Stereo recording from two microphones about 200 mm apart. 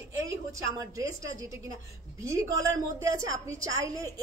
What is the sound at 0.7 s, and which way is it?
Speech, 15° right (ahead or behind).